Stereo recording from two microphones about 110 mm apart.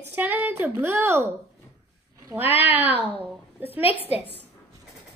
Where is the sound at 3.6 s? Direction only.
15° right (ahead or behind).